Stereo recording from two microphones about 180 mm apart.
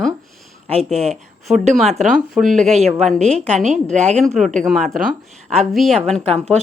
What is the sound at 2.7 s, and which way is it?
Speech, 35° right (ahead or behind).